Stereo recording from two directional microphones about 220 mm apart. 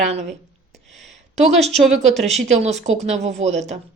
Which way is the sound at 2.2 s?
30° right (ahead or behind).